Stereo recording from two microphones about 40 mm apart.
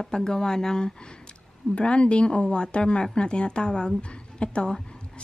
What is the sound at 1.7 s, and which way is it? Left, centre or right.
A woman's voice, left.